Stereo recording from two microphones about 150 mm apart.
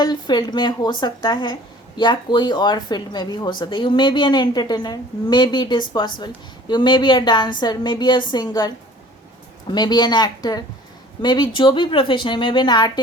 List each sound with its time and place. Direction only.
0.0 s a woman's voice: 25° left (ahead or behind)
9.7 s a woman's voice: 30° left (ahead or behind)